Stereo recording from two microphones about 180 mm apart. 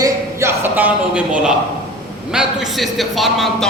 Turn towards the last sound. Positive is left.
turn(degrees=0)  # may be behind; listen again after turning